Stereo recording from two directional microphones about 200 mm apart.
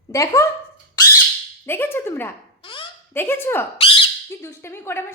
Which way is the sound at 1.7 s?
10° left (ahead or behind).